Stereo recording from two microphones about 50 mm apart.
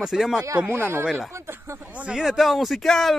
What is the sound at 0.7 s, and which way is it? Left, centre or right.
Speech, right.